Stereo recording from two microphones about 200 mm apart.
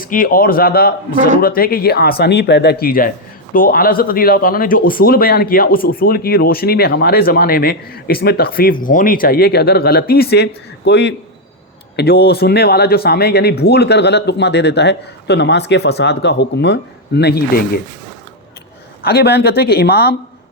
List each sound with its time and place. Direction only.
0.0 s speech: 45° left (ahead or behind)
19.0 s speech: 55° left (ahead or behind)